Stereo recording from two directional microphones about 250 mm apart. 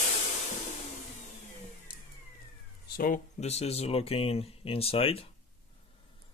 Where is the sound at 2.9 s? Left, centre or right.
Left.